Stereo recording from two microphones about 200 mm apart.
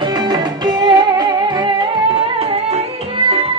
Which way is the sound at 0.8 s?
20° right (ahead or behind).